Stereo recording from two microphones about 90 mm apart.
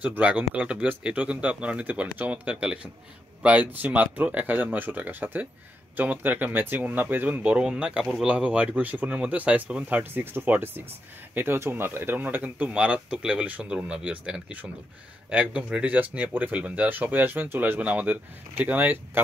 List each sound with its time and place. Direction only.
0.0 s speech: 15° right (ahead or behind)